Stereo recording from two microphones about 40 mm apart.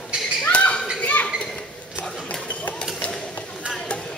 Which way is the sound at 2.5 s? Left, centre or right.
Left.